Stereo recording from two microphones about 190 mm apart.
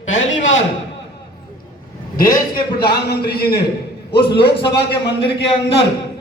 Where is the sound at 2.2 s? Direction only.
50° left (ahead or behind).